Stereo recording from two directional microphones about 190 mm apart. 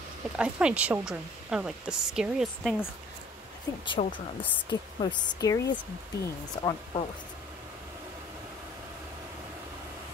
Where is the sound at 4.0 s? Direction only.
30° left (ahead or behind).